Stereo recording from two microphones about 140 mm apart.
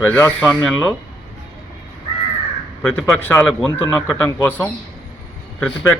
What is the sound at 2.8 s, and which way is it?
Speech, 10° left (ahead or behind).